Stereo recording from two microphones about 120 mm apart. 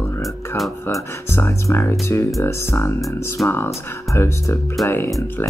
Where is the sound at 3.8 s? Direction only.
20° left (ahead or behind).